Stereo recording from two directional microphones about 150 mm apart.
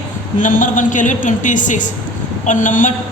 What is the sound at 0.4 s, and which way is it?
A woman's voice, 60° left (ahead or behind).